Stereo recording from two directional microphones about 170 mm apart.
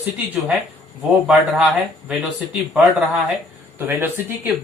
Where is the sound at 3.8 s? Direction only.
10° right (ahead or behind).